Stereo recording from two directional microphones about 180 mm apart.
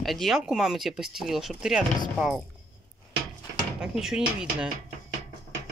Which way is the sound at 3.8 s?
5° right (ahead or behind).